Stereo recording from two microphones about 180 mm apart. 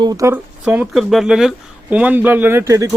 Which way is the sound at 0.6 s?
5° right (ahead or behind).